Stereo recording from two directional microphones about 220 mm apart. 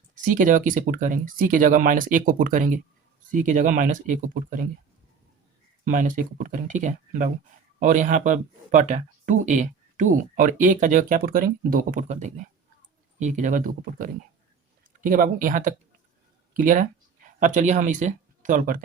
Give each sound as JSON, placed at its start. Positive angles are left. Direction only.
{"t": 0.3, "sound": "speech", "side_deg": -35}
{"t": 5.9, "sound": "speech", "side_deg": -35}